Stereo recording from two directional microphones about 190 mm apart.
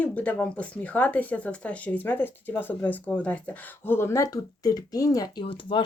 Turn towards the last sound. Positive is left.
turn(degrees=25)  # may be behind; listen again after turning